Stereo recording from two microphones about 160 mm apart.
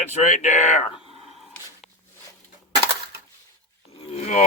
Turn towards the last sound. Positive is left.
turn(degrees=45)  # may be behind; listen again after turning